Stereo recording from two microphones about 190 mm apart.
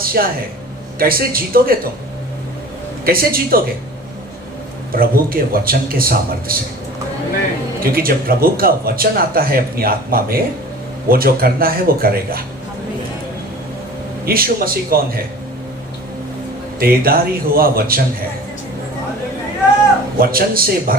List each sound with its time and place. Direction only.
0.0 s a sound: 50° right (ahead or behind)
0.9 s speech: 50° right (ahead or behind)
3.0 s speech: 50° right (ahead or behind)
4.9 s speech: 50° right (ahead or behind)
7.8 s speech: 50° right (ahead or behind)
14.3 s speech: 50° right (ahead or behind)
16.8 s speech: 50° right (ahead or behind)
20.1 s speech: 50° right (ahead or behind)